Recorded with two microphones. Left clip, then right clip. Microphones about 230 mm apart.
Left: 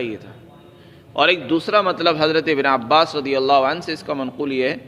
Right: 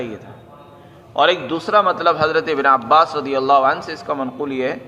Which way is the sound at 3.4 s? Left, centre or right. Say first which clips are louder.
Right 2 dB; left.